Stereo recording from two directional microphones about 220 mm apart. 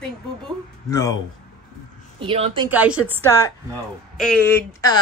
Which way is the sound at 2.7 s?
5° right (ahead or behind).